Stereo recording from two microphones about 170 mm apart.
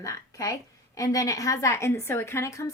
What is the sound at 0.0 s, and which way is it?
A woman's voice, 20° left (ahead or behind).